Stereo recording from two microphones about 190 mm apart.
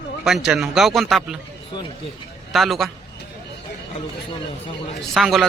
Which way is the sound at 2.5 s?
Centre (ahead or behind).